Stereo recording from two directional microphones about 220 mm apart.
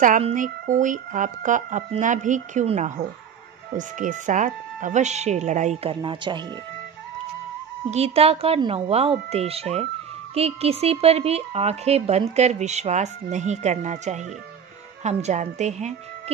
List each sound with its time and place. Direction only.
0.0 s speech: 35° right (ahead or behind)
7.9 s speech: 25° right (ahead or behind)